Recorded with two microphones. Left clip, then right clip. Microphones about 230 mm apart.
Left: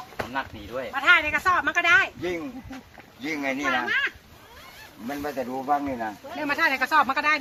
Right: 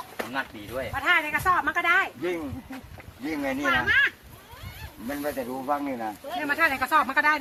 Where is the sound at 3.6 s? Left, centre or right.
Right.